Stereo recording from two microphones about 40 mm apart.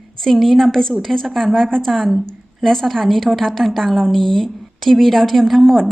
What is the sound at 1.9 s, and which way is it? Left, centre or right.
A woman's voice, centre.